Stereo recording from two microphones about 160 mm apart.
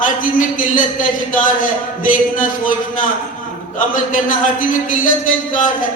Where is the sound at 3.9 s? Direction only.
55° left (ahead or behind).